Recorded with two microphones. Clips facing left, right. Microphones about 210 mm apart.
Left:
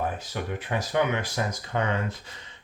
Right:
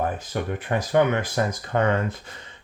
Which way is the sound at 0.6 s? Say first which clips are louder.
Right 6 dB; 50° right (ahead or behind).